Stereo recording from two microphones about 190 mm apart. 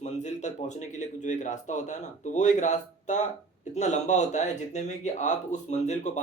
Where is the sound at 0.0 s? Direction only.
40° left (ahead or behind).